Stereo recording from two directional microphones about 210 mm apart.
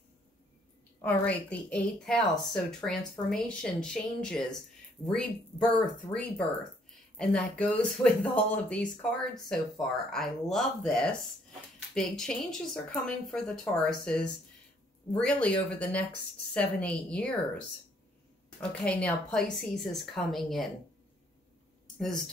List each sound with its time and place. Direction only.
1.0 s speech: 5° left (ahead or behind)
18.6 s speech: 5° left (ahead or behind)
21.9 s speech: centre (ahead or behind)